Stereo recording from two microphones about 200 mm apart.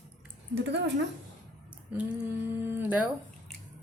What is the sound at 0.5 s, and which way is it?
Speech, 60° right (ahead or behind).